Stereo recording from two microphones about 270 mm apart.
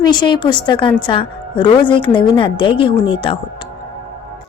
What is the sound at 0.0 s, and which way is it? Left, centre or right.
A woman's voice, centre.